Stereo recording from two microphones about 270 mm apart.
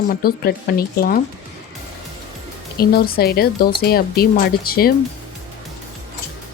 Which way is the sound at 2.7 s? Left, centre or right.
Left.